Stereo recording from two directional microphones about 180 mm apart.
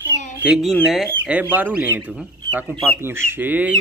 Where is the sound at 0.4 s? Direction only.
Centre (ahead or behind).